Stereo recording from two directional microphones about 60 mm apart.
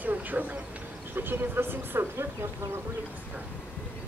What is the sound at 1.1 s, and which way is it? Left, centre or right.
Speech, right.